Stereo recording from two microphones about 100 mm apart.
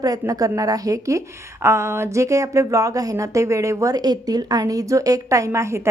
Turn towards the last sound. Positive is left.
turn(degrees=-30)  # may be behind; listen again after turning